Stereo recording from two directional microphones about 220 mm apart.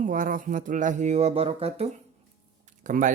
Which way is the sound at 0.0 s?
35° right (ahead or behind).